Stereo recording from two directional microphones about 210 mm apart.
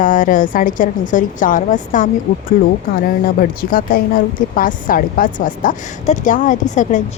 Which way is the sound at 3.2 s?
40° left (ahead or behind).